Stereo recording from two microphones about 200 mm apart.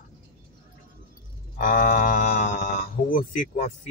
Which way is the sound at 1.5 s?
40° left (ahead or behind).